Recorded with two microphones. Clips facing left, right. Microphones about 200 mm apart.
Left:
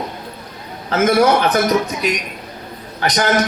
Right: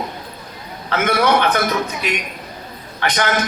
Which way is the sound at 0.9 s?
40° left (ahead or behind).